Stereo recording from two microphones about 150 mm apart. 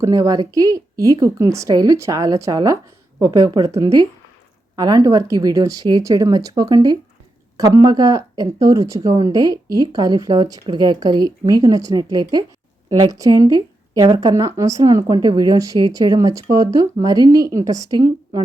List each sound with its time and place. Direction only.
0.0 s speech: 20° right (ahead or behind)